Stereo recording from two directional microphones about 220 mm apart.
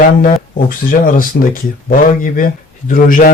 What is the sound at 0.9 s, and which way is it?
A man's voice, 40° left (ahead or behind).